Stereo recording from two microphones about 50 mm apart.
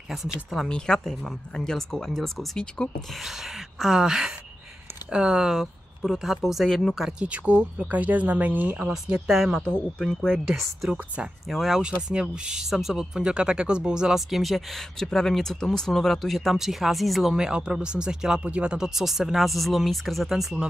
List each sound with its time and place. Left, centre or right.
0.7 s speech: centre
3.8 s speech: centre
7.1 s speech: right
9.3 s speech: centre
9.7 s speech: centre
11.8 s speech: centre
17.4 s speech: centre
18.9 s speech: centre